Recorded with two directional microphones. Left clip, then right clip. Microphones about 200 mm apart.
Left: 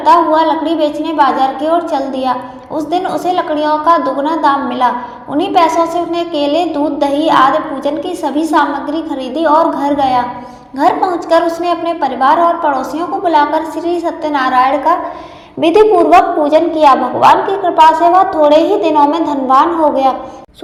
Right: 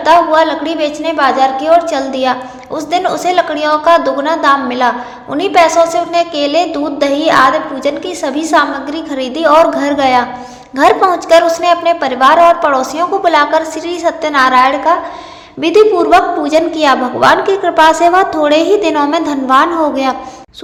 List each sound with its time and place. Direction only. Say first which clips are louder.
0.0 s a woman's voice: right 1 dB; 25° right (ahead or behind)